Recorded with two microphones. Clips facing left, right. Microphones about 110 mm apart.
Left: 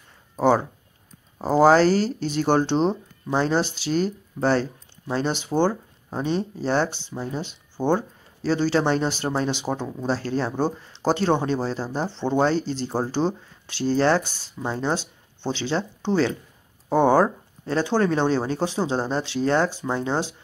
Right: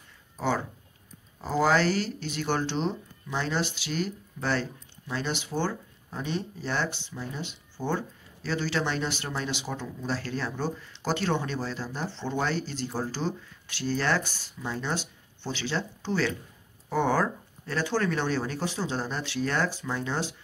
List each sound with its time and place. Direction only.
1.4 s speech: 35° left (ahead or behind)